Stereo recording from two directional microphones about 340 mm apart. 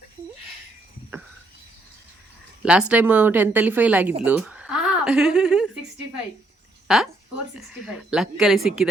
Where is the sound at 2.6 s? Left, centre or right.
Centre.